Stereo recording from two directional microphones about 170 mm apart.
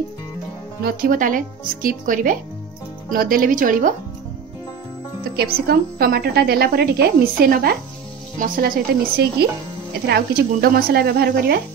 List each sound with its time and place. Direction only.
0.8 s speech: 55° right (ahead or behind)
5.3 s a woman's voice: 65° right (ahead or behind)